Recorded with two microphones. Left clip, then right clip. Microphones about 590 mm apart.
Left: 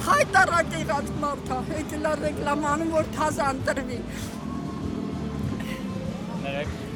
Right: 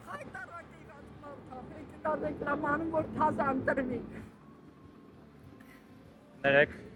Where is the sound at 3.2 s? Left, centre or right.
Left.